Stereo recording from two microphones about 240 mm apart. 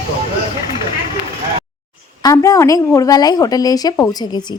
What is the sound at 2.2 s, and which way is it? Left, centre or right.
A woman's voice, centre.